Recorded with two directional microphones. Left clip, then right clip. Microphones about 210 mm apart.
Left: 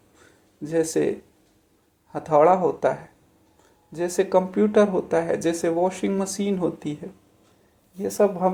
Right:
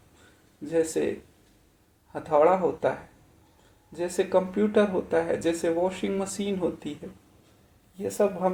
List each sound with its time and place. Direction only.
0.6 s speech: 25° left (ahead or behind)
2.1 s speech: 25° left (ahead or behind)
3.9 s speech: 25° left (ahead or behind)
7.9 s speech: 25° left (ahead or behind)